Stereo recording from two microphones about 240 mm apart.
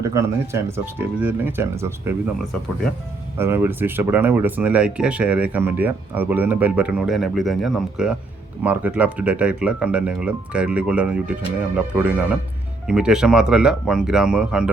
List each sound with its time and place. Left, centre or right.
0.0 s speech: centre
3.3 s speech: centre